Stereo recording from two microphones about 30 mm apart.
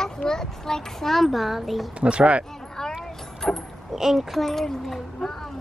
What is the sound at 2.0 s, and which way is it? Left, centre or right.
Speech, right.